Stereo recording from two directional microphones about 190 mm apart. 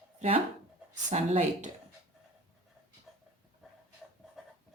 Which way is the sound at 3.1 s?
Centre (ahead or behind).